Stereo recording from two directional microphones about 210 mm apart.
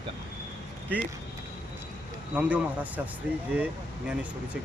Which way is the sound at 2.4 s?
5° right (ahead or behind).